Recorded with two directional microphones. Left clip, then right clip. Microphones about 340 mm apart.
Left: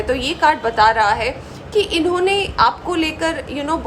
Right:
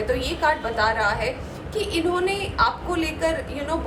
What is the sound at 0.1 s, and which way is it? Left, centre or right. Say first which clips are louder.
A woman's voice: left 7 dB; left.